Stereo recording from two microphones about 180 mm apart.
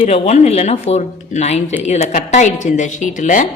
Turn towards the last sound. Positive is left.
turn(degrees=45)  # may be behind; listen again after turning